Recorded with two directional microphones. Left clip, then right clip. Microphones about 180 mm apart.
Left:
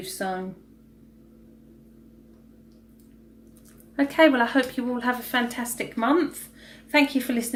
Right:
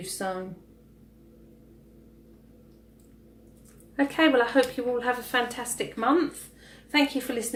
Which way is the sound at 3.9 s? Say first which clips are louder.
Left 3 dB; 45° left (ahead or behind).